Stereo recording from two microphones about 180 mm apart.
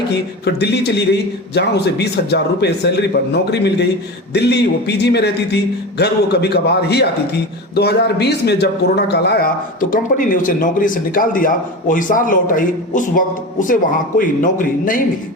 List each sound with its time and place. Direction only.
0.1 s a man's voice: 65° left (ahead or behind)
9.9 s speech: 50° left (ahead or behind)